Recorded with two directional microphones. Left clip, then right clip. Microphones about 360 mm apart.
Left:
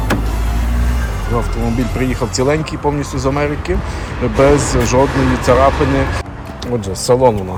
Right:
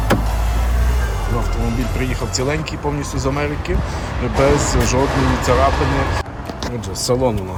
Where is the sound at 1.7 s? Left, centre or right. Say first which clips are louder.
Left 4 dB; centre.